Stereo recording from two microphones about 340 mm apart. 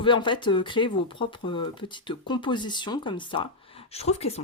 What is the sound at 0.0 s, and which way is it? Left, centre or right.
Speech, centre.